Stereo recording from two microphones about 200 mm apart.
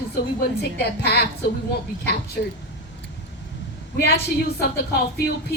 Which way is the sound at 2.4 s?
50° left (ahead or behind).